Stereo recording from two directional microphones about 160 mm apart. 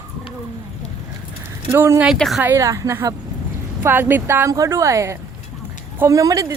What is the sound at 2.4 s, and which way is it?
Speech, 15° right (ahead or behind).